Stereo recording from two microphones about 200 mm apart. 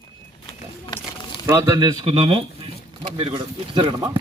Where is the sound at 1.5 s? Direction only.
15° right (ahead or behind).